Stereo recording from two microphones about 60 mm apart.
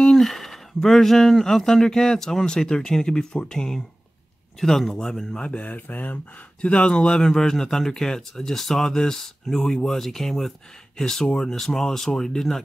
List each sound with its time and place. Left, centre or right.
0.0 s speech: centre
5.4 s speech: left
6.6 s speech: centre